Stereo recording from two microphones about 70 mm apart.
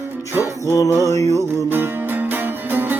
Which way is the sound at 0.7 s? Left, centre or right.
Left.